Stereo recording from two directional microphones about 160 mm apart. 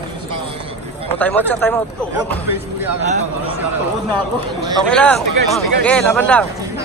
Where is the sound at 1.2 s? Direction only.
10° left (ahead or behind).